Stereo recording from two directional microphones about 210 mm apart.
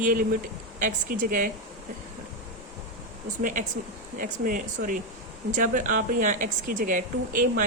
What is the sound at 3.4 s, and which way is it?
Speech, 40° right (ahead or behind).